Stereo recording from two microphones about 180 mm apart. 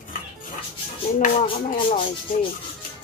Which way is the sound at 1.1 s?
50° left (ahead or behind).